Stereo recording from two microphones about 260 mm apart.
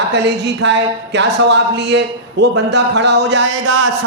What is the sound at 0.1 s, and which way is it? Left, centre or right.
Speech, right.